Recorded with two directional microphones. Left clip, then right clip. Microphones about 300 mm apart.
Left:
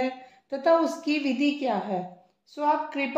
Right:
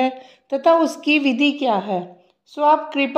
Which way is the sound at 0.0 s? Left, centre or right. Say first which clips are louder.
Right 8 dB; right.